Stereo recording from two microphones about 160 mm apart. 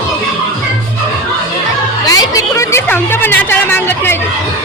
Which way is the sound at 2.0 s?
25° left (ahead or behind).